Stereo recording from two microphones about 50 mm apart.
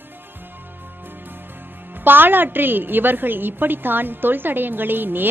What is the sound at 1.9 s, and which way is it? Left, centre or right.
A woman's voice, right.